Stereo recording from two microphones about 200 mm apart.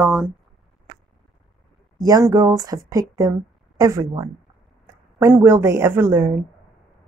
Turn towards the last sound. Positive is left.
turn(degrees=-10)  # may be behind; listen again after turning